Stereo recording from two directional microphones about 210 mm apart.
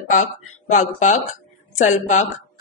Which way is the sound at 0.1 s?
35° left (ahead or behind).